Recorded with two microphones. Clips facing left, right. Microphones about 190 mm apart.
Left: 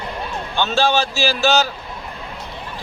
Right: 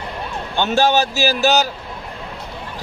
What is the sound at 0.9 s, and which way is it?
Speech, 40° right (ahead or behind).